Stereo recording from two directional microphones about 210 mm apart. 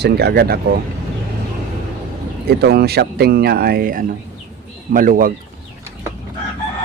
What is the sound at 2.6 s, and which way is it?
Speech, 50° right (ahead or behind).